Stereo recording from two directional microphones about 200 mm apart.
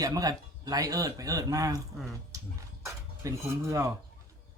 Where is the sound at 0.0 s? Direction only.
20° right (ahead or behind).